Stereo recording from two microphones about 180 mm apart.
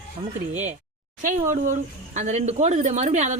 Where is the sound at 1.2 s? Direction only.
45° right (ahead or behind).